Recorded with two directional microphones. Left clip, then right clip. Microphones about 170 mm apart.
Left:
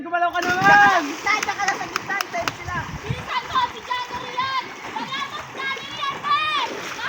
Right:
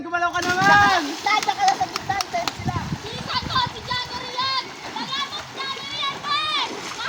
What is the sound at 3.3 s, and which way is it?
Splash, 10° right (ahead or behind).